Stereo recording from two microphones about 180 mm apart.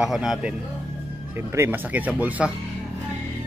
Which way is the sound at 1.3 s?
15° right (ahead or behind).